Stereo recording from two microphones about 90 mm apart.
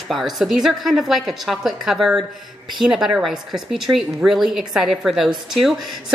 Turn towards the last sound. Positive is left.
turn(degrees=0)  # may be behind; listen again after turning